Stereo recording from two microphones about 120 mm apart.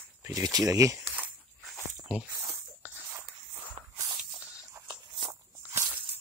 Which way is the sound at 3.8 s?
50° right (ahead or behind).